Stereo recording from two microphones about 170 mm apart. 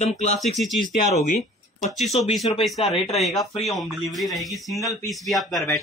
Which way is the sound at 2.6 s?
Centre (ahead or behind).